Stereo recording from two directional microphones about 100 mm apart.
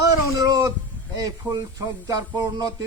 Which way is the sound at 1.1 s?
35° right (ahead or behind).